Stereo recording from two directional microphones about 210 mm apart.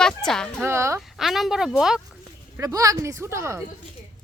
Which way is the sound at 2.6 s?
15° right (ahead or behind).